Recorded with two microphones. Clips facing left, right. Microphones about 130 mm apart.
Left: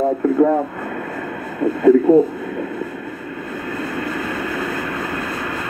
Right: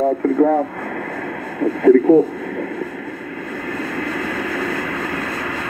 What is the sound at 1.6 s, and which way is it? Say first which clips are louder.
Speech: right 1 dB; 5° left (ahead or behind).